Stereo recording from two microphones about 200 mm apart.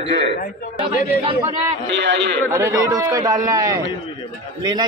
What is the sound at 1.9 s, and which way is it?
Speech, 60° right (ahead or behind).